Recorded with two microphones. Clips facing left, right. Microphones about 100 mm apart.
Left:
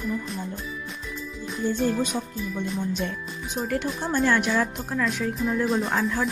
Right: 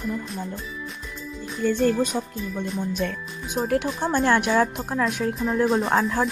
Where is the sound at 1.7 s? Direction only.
60° right (ahead or behind).